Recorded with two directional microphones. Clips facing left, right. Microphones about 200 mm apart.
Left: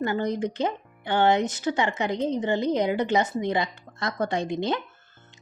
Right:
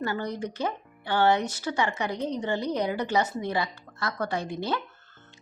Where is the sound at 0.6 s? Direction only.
20° left (ahead or behind).